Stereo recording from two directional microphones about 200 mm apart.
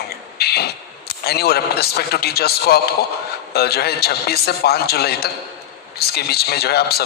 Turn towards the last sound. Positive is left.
turn(degrees=50)  # may be behind; listen again after turning